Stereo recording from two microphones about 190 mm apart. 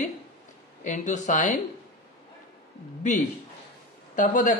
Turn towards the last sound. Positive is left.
turn(degrees=45)  # may be behind; listen again after turning